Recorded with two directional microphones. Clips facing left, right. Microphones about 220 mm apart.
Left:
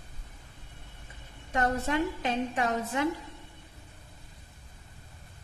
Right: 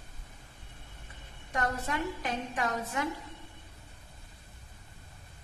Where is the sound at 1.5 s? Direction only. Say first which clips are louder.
Left 5 dB; 25° left (ahead or behind).